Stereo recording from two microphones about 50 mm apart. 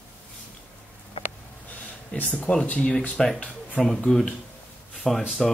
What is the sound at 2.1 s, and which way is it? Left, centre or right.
Speech, left.